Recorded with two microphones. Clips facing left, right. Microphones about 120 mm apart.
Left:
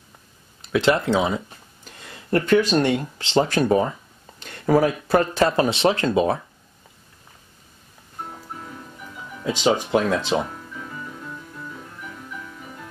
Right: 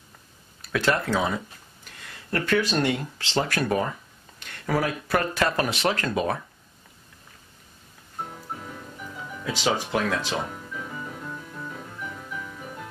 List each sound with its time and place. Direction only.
0.6 s speech: 20° left (ahead or behind)
9.4 s speech: 20° left (ahead or behind)